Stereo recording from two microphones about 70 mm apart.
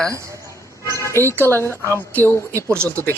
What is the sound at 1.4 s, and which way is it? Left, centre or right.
Speech, left.